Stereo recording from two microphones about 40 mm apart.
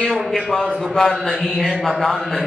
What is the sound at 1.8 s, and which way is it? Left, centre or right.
Speech, centre.